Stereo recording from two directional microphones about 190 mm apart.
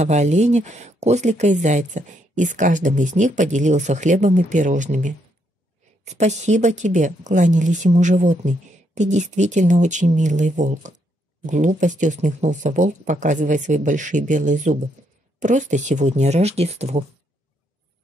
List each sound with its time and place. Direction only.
0.0 s speech: 35° right (ahead or behind)